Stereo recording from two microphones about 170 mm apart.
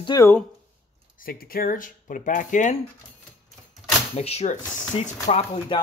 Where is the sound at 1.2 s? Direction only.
60° left (ahead or behind).